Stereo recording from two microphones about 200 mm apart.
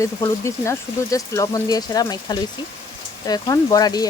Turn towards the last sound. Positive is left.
turn(degrees=20)  # may be behind; listen again after turning